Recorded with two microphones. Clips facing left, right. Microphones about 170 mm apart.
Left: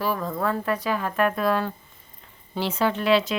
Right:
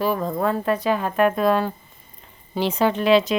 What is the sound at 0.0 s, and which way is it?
Speech, 25° right (ahead or behind).